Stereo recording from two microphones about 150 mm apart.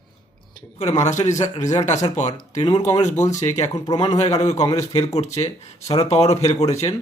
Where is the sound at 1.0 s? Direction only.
50° left (ahead or behind).